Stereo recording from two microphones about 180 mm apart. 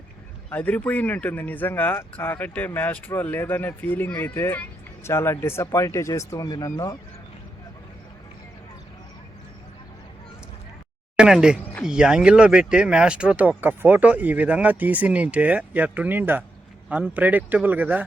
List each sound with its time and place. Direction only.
0.5 s speech: 10° left (ahead or behind)
11.2 s speech: 5° right (ahead or behind)
11.6 s a sound: 10° left (ahead or behind)
11.9 s speech: 5° right (ahead or behind)